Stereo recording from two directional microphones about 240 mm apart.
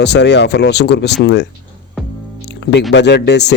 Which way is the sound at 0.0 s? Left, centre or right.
Left.